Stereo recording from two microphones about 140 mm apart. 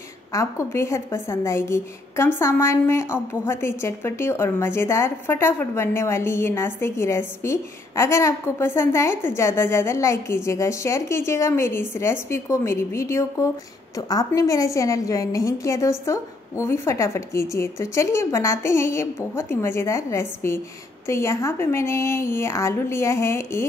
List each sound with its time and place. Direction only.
0.3 s a woman's voice: 20° left (ahead or behind)